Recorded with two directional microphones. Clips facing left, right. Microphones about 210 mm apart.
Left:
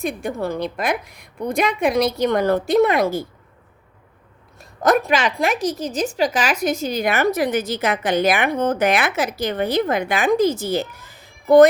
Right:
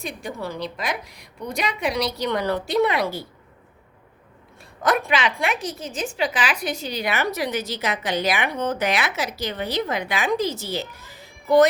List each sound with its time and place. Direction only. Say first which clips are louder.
0.0 s a woman's voice: left 7 dB; 55° left (ahead or behind)
4.8 s a woman's voice: left 4 dB; 40° left (ahead or behind)